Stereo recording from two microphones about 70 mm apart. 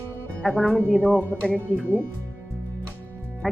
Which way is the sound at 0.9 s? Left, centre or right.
Right.